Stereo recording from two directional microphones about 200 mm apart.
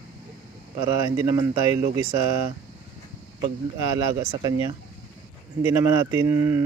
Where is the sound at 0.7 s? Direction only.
20° right (ahead or behind).